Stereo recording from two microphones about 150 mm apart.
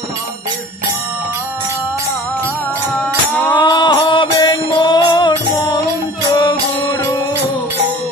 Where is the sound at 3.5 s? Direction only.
30° left (ahead or behind).